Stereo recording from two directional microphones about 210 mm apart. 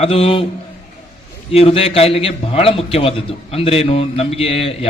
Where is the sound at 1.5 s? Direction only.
25° left (ahead or behind).